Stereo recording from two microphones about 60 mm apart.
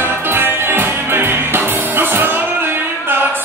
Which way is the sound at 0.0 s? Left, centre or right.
Right.